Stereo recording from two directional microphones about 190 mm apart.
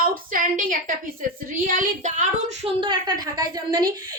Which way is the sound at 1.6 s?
40° right (ahead or behind).